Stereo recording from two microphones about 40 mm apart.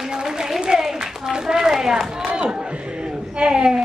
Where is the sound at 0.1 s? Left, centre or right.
Centre.